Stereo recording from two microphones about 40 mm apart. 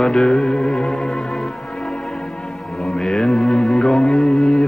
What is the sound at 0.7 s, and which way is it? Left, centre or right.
Music, centre.